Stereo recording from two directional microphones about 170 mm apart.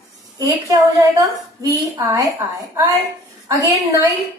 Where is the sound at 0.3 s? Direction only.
20° right (ahead or behind).